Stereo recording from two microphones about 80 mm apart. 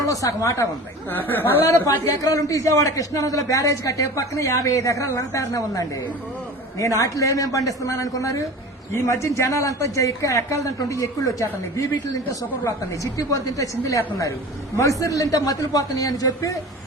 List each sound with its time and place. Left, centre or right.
0.0 s a man's voice: left
1.1 s speech: left
1.6 s a man's voice: left
7.0 s a man's voice: left